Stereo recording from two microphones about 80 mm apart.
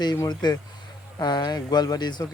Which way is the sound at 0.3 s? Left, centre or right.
Left.